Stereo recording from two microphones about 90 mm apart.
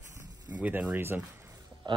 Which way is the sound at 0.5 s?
15° right (ahead or behind).